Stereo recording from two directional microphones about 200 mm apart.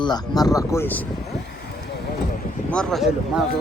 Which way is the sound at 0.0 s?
20° left (ahead or behind).